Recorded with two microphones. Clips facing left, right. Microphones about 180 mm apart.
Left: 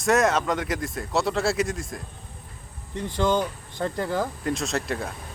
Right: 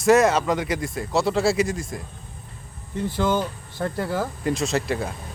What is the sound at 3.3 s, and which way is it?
Speech, 15° left (ahead or behind).